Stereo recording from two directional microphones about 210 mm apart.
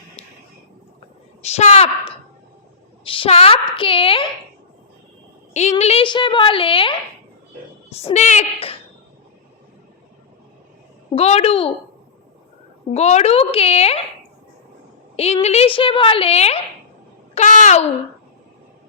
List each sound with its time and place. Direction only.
1.4 s a woman's voice: 30° left (ahead or behind)
5.5 s a woman's voice: 30° left (ahead or behind)
11.1 s a woman's voice: 30° left (ahead or behind)
12.9 s a woman's voice: 30° left (ahead or behind)
15.1 s a woman's voice: 30° left (ahead or behind)
17.3 s a sound: 35° left (ahead or behind)